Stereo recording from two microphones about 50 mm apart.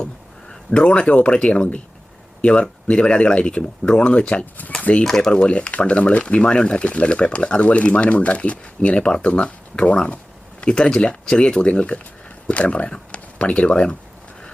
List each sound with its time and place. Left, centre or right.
0.7 s speech: left
5.0 s speech: centre
5.3 s speech: left